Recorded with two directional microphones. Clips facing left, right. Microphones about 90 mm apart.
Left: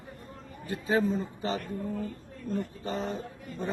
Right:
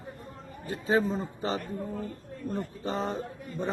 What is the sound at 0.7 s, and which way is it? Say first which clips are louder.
A man's voice: right 1 dB; 30° right (ahead or behind).